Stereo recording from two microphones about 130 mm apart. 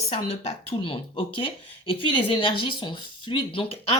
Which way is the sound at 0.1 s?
55° left (ahead or behind).